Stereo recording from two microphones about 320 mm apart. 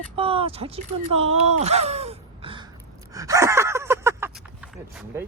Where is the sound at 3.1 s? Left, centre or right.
Centre.